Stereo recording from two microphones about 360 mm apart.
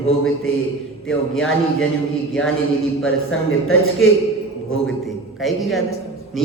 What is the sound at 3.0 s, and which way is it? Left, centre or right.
Speech, left.